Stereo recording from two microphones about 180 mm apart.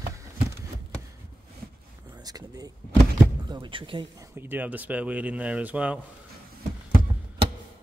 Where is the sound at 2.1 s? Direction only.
20° right (ahead or behind).